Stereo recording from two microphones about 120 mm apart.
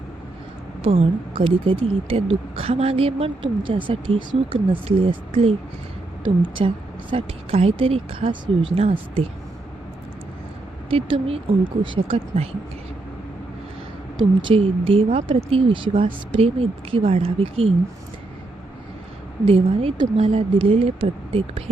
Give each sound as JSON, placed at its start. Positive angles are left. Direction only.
{"t": 0.8, "sound": "a woman's voice", "side_deg": -50}
{"t": 3.4, "sound": "a woman's voice", "side_deg": -45}
{"t": 6.2, "sound": "a woman's voice", "side_deg": -45}
{"t": 7.1, "sound": "a woman's voice", "side_deg": -55}
{"t": 10.8, "sound": "a woman's voice", "side_deg": -50}
{"t": 14.4, "sound": "a woman's voice", "side_deg": -50}
{"t": 19.5, "sound": "a woman's voice", "side_deg": -50}